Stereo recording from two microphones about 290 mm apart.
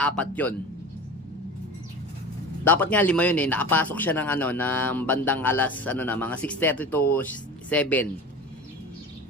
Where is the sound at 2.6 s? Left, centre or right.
Centre.